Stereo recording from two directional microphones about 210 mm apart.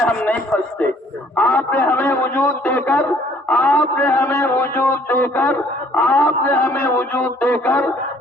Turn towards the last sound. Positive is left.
turn(degrees=10)  # may be behind; listen again after turning